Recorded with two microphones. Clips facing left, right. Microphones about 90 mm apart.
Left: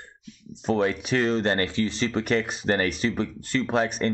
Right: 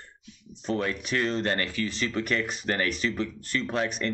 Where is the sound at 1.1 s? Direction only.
35° left (ahead or behind).